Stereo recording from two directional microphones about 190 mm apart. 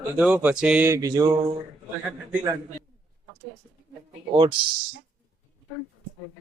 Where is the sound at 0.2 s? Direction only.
5° right (ahead or behind).